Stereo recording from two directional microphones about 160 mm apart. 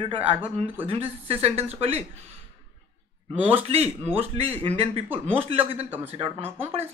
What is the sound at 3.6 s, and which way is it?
Speech, 40° right (ahead or behind).